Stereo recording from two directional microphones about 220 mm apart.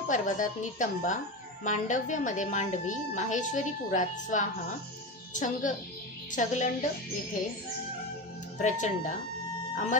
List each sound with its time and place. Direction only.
0.1 s a woman's voice: 35° left (ahead or behind)
8.5 s a woman's voice: 35° left (ahead or behind)